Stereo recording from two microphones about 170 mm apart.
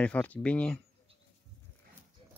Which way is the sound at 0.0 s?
5° left (ahead or behind).